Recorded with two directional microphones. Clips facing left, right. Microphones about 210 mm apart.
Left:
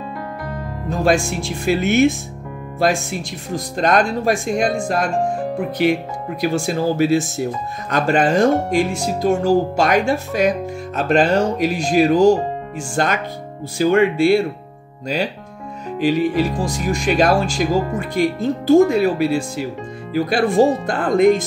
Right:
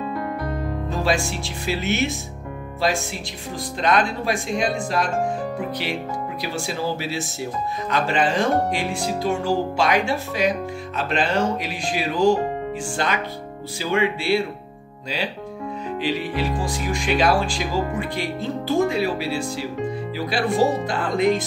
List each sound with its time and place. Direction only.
0.8 s speech: 50° left (ahead or behind)
3.5 s speech: 45° left (ahead or behind)
16.6 s speech: 40° left (ahead or behind)